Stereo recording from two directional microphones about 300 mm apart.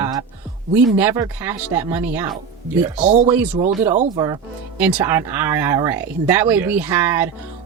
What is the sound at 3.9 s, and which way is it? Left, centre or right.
Speech, right.